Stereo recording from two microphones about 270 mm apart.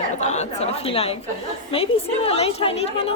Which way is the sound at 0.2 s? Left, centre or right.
Left.